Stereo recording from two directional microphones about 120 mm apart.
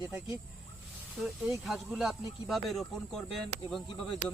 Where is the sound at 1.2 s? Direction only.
5° right (ahead or behind).